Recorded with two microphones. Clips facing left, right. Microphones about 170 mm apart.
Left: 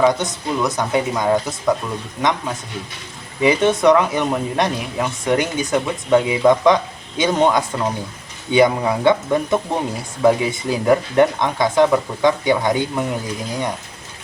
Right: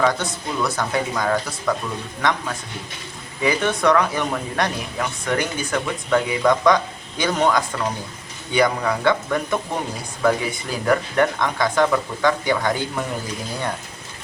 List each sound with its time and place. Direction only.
0.0 s speech: 20° left (ahead or behind)
3.4 s speech: 25° left (ahead or behind)